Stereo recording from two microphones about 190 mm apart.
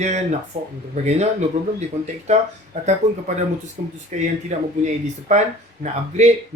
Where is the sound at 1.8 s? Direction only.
35° right (ahead or behind).